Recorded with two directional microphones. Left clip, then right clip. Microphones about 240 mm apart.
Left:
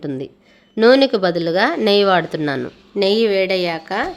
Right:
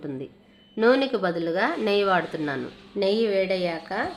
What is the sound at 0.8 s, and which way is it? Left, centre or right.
Sizzle, left.